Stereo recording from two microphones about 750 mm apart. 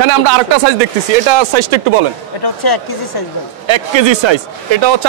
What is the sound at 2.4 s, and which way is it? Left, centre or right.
Speech, left.